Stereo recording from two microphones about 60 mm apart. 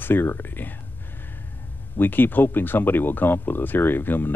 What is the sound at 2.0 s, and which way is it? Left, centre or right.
Speech, left.